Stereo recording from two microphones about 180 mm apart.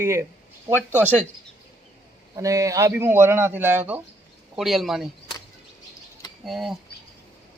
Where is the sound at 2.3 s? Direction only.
20° right (ahead or behind).